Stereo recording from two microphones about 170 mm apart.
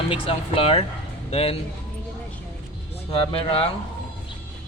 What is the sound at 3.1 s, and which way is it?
Speech, 30° left (ahead or behind).